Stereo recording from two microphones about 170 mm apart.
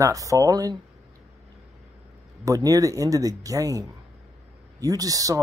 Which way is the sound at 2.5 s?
20° right (ahead or behind).